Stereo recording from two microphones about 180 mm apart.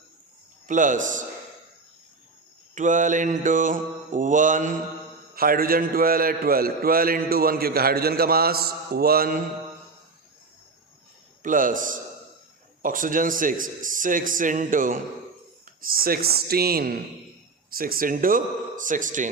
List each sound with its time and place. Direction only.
0.7 s a man's voice: 45° right (ahead or behind)
2.7 s a man's voice: 45° right (ahead or behind)
11.4 s a man's voice: 50° right (ahead or behind)